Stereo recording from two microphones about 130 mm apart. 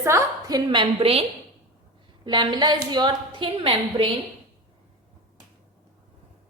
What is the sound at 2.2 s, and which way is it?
A woman's voice, 35° right (ahead or behind).